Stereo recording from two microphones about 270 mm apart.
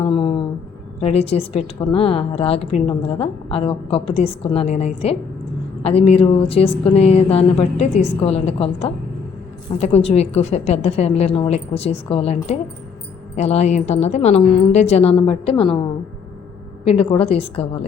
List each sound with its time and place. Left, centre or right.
0.0 s a woman's voice: centre
16.8 s a woman's voice: left